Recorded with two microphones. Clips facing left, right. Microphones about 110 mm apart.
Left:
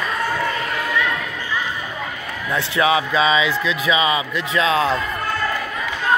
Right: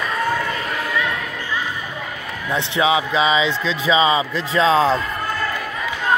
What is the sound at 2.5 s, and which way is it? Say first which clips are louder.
A man's voice: even; 20° right (ahead or behind).